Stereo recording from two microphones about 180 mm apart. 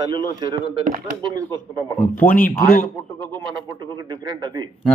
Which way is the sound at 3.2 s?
25° right (ahead or behind).